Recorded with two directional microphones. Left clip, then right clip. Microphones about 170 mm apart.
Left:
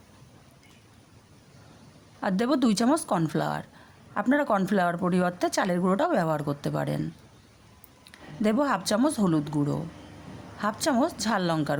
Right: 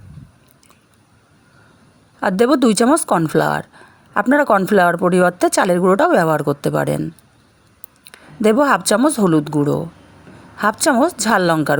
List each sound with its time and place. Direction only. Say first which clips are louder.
2.2 s a woman's voice: right 12 dB; 45° right (ahead or behind)
8.0 s a woman's voice: right 12 dB; 45° right (ahead or behind)